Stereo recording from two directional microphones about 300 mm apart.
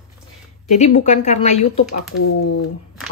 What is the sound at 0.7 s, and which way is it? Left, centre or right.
Speech, left.